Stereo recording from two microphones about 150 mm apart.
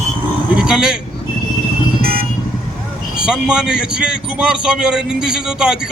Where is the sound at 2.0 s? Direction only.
85° right.